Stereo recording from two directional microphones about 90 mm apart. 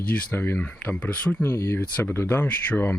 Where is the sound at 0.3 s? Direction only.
25° left (ahead or behind).